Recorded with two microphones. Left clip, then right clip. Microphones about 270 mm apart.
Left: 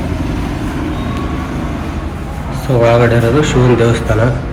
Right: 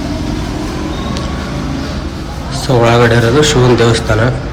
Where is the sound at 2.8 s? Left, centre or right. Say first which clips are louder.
Even; centre.